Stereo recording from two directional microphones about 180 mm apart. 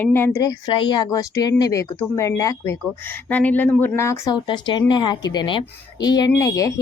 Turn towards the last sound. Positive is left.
turn(degrees=20)  # may be behind; listen again after turning